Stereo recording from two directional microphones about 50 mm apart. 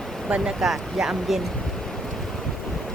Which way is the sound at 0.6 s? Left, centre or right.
Centre.